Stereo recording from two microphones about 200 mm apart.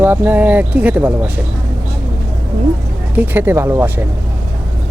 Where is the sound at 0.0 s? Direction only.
10° right (ahead or behind).